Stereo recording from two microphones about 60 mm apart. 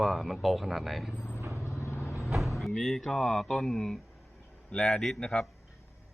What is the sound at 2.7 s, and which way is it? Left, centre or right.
A man's voice, centre.